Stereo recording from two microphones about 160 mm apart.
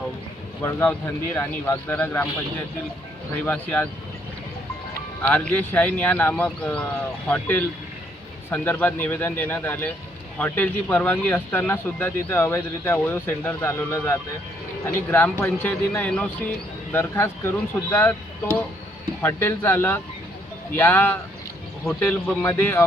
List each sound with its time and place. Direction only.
0.6 s speech: 10° left (ahead or behind)
3.4 s speech: 10° left (ahead or behind)
5.2 s speech: 10° left (ahead or behind)